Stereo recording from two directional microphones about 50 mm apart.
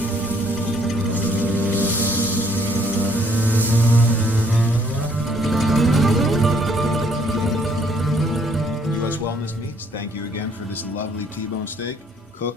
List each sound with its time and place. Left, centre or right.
1.3 s music: right
5.3 s music: centre